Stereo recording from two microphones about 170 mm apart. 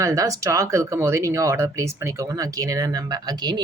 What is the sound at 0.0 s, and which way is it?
Speech, 20° right (ahead or behind).